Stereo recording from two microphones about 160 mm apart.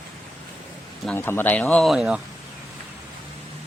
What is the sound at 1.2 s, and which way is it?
Speech, 15° left (ahead or behind).